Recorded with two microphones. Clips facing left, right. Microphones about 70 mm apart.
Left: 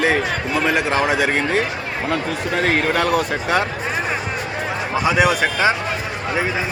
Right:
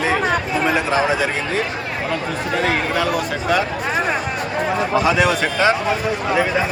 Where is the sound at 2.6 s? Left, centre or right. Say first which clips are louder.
Left 2 dB; left.